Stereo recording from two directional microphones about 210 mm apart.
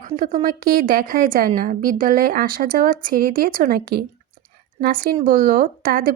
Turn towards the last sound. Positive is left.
turn(degrees=-40)  # may be behind; listen again after turning